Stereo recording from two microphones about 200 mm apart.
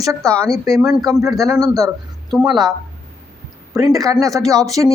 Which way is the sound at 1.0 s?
15° right (ahead or behind).